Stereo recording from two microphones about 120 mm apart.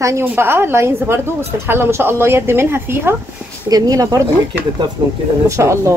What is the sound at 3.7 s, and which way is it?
Speech, 30° right (ahead or behind).